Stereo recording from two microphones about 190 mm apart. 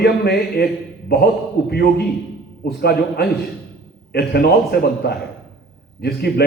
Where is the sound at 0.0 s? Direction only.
55° left (ahead or behind).